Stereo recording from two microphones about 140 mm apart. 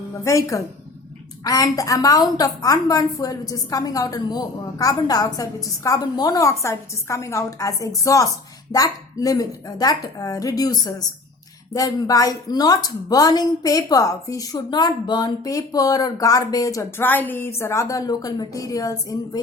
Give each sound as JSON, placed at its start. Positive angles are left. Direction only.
{"t": 0.3, "sound": "a woman's voice", "side_deg": 20}